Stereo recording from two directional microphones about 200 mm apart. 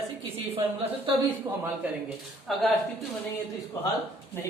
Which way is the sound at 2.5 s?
Centre (ahead or behind).